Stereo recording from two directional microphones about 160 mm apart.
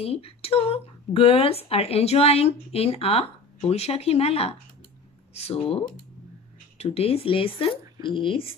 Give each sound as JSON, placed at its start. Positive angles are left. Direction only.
{"t": 0.0, "sound": "speech", "side_deg": 40}
{"t": 6.8, "sound": "speech", "side_deg": 40}